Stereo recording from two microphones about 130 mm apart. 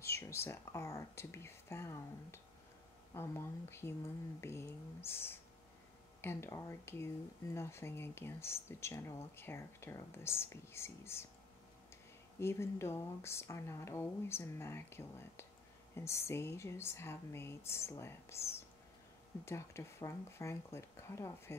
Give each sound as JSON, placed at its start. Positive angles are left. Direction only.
{"t": 0.0, "sound": "speech", "side_deg": 20}
{"t": 12.4, "sound": "speech", "side_deg": 20}